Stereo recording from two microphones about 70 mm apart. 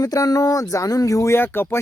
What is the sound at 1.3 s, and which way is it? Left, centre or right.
Speech, left.